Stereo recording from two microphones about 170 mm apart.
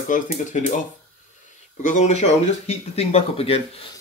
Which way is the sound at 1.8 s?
45° left (ahead or behind).